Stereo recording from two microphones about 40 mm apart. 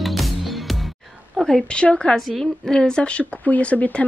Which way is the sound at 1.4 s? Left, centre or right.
Centre.